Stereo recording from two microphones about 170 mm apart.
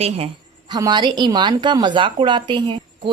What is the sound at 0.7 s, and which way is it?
A woman's voice, 25° right (ahead or behind).